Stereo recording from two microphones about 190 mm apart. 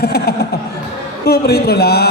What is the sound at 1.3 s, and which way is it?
Speech, 55° left (ahead or behind).